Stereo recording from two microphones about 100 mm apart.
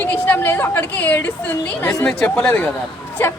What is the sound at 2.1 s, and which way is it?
Speech, 5° left (ahead or behind).